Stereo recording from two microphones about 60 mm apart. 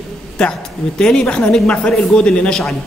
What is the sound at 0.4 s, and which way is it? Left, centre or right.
A man's voice, centre.